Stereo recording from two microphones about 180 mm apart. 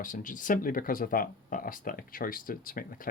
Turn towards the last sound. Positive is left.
turn(degrees=50)  # may be behind; listen again after turning